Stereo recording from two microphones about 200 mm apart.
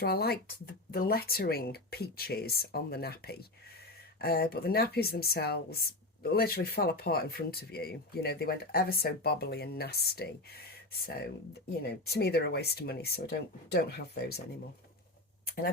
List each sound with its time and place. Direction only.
0.0 s speech: 50° left (ahead or behind)
11.7 s speech: 55° left (ahead or behind)
15.4 s a sound: 45° left (ahead or behind)